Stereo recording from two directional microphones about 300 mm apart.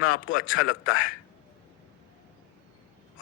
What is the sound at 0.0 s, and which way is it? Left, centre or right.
Speech, left.